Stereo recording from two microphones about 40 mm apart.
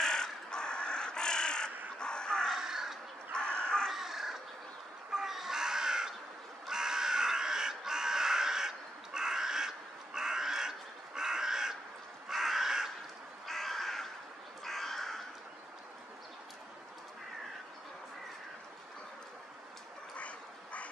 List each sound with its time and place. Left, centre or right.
0.0 s crow: centre
2.0 s a sound: left
2.6 s crow: centre
3.3 s crow: left
3.9 s crow: centre
5.1 s chicken: centre
6.7 s crow: centre
12.3 s crow: centre
13.5 s crow: centre
20.2 s duck: left